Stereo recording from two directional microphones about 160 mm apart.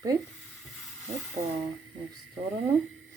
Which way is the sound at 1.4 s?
40° right (ahead or behind).